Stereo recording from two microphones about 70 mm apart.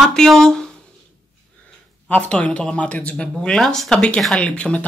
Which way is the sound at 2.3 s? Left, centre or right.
Centre.